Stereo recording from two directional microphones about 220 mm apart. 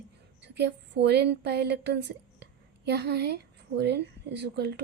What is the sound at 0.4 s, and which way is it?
Speech, 50° right (ahead or behind).